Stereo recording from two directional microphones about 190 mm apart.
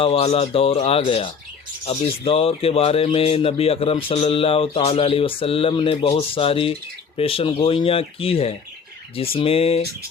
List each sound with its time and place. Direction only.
0.0 s speech: 30° left (ahead or behind)